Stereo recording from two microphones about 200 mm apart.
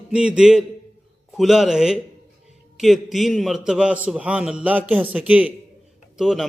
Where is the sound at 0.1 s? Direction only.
5° right (ahead or behind).